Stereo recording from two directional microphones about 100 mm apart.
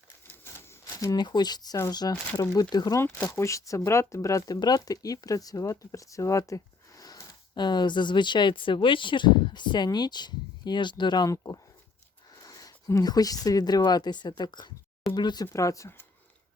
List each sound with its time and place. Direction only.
0.9 s speech: 40° left (ahead or behind)
3.3 s speech: 30° left (ahead or behind)
15.5 s speech: 30° left (ahead or behind)